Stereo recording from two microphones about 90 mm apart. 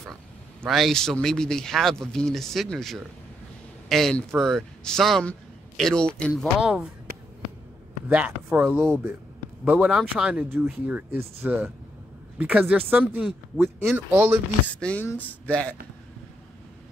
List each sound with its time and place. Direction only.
0.7 s speech: centre (ahead or behind)
6.3 s speech: 5° right (ahead or behind)
8.1 s speech: 15° right (ahead or behind)
9.8 s speech: 5° right (ahead or behind)
10.5 s speech: 20° right (ahead or behind)
14.8 s speech: 15° left (ahead or behind)